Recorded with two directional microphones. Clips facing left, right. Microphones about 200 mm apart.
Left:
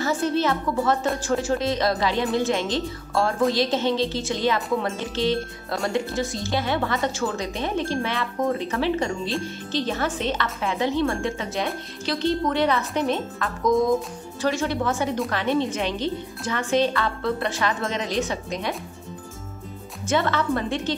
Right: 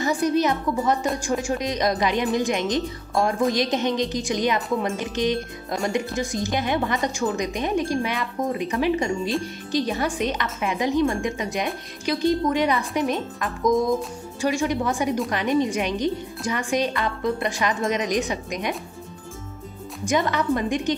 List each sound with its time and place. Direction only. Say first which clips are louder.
0.0 s a woman's voice: right 2 dB; 15° right (ahead or behind)
20.1 s a woman's voice: right 1 dB; 15° right (ahead or behind)